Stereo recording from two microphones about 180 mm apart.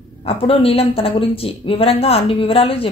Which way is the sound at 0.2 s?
30° left (ahead or behind).